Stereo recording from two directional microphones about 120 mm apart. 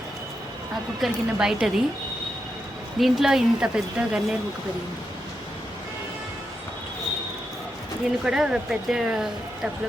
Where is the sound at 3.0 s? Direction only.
Centre (ahead or behind).